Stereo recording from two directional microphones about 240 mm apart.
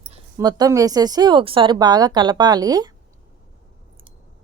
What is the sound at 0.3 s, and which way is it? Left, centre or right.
Speech, centre.